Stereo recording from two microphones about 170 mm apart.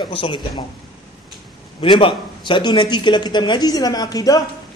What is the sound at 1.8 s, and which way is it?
A man's voice, 30° left (ahead or behind).